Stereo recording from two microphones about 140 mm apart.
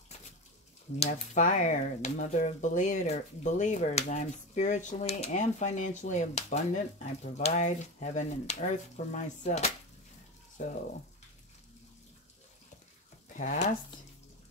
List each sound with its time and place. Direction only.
0.9 s speech: 45° left (ahead or behind)
1.4 s speech: 65° left (ahead or behind)
13.3 s speech: 60° left (ahead or behind)